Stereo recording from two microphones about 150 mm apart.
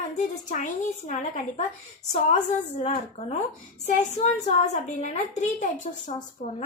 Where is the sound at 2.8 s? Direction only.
45° left (ahead or behind).